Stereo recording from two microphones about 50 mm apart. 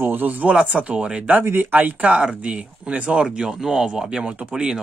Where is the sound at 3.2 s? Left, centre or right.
Centre.